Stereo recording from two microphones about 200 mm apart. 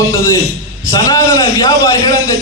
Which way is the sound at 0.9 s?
15° left (ahead or behind).